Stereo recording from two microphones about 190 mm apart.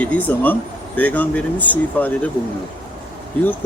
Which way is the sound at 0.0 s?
10° left (ahead or behind).